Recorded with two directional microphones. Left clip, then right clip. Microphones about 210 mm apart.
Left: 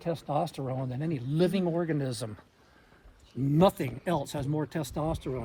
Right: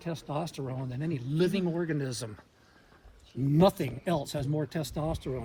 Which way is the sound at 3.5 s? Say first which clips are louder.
Even; 10° left (ahead or behind).